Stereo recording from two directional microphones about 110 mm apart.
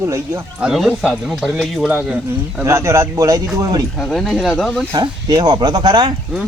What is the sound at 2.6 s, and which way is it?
Speech, 25° right (ahead or behind).